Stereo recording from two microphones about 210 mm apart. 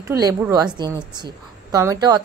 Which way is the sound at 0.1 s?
15° right (ahead or behind).